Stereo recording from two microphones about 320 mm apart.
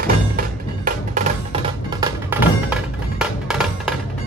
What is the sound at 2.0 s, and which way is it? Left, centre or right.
Music, centre.